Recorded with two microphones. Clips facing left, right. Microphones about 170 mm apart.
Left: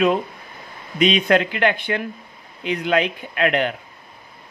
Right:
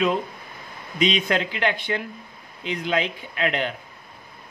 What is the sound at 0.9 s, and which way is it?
Speech, 60° left (ahead or behind).